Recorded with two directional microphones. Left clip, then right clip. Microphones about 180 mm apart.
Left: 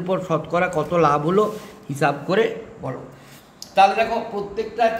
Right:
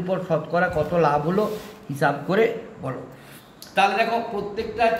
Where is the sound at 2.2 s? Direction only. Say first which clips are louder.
Left 1 dB; 15° left (ahead or behind).